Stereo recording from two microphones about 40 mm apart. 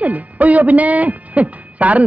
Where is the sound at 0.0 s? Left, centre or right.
Right.